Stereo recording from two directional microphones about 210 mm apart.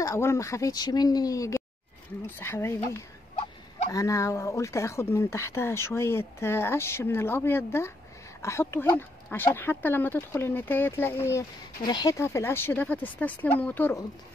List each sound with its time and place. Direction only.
0.0 s speech: 15° left (ahead or behind)